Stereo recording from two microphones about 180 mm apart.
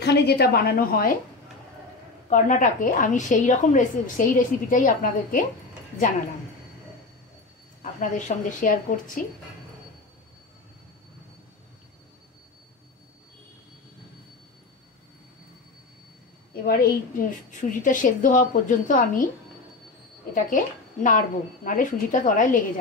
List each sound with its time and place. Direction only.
0.0 s a woman's voice: 65° left (ahead or behind)
2.2 s a woman's voice: 45° left (ahead or behind)
7.8 s a woman's voice: 45° left (ahead or behind)
16.6 s a woman's voice: 60° left (ahead or behind)
20.3 s a woman's voice: 45° left (ahead or behind)